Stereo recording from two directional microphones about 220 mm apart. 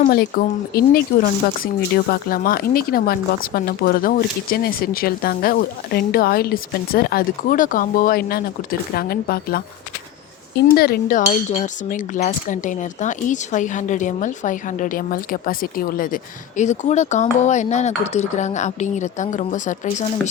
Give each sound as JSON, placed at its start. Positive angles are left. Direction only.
{"t": 0.0, "sound": "speech", "side_deg": 40}
{"t": 10.7, "sound": "chink", "side_deg": 45}